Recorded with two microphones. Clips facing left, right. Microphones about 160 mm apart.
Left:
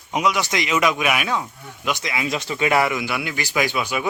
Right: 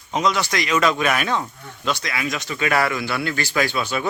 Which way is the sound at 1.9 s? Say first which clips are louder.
Left 2 dB; 20° left (ahead or behind).